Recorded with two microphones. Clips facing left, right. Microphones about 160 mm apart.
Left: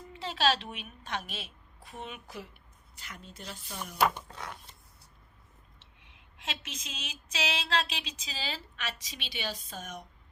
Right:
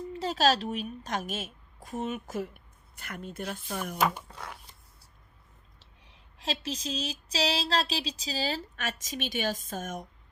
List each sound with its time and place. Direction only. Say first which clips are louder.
0.1 s a woman's voice: right 3 dB; 40° right (ahead or behind)
4.0 s speech: left 2 dB; 5° right (ahead or behind)
5.8 s a sound: right 1 dB; 35° right (ahead or behind)